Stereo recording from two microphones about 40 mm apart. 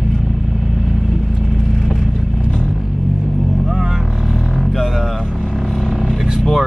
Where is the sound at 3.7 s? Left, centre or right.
Centre.